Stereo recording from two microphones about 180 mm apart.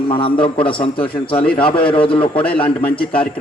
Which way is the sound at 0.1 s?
30° left (ahead or behind).